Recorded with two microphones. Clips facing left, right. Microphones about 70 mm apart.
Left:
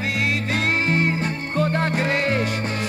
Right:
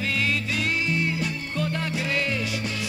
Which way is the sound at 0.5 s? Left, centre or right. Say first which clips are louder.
Left 5 dB; left.